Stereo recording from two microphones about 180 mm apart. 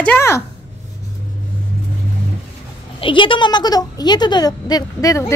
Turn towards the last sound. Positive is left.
turn(degrees=15)  # may be behind; listen again after turning